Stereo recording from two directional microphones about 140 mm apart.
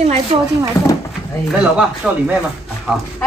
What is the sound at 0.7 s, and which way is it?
Speech, 20° left (ahead or behind).